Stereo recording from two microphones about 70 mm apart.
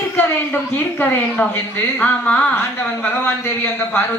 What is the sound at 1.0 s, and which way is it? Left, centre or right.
A woman's voice, left.